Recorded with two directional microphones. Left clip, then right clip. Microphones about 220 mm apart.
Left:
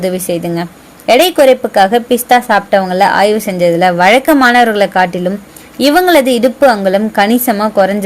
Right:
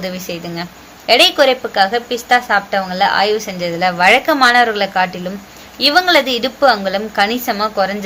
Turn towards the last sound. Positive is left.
turn(degrees=40)  # may be behind; listen again after turning